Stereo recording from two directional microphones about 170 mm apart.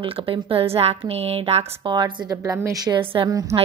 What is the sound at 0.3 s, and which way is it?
A woman's voice, 35° right (ahead or behind).